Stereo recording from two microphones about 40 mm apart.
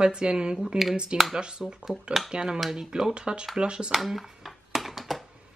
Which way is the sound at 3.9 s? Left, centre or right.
Centre.